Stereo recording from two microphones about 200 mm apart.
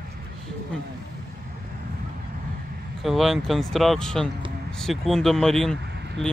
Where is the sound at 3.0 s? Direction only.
Centre (ahead or behind).